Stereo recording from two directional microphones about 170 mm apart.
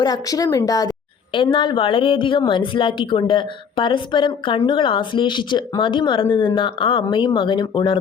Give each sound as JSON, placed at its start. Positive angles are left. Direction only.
{"t": 0.0, "sound": "a woman's voice", "side_deg": 20}